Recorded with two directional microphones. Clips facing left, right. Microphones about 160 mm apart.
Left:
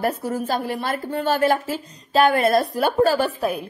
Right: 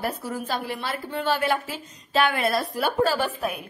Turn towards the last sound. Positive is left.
turn(degrees=45)  # may be behind; listen again after turning